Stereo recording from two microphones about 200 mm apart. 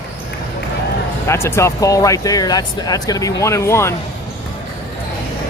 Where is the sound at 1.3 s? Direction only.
15° left (ahead or behind).